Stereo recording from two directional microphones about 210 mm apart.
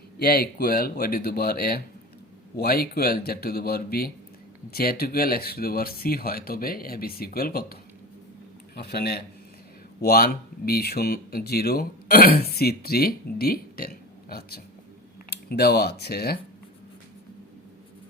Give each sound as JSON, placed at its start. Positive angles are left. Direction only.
{"t": 0.2, "sound": "speech", "side_deg": 45}